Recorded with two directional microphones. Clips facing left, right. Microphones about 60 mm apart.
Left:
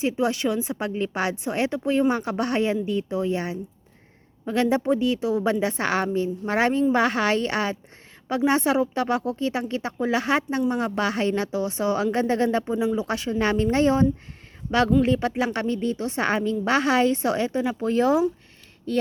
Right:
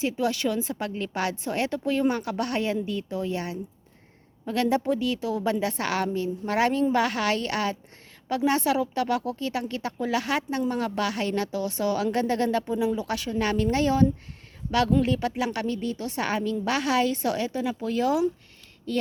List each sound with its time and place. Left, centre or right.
0.0 s a woman's voice: left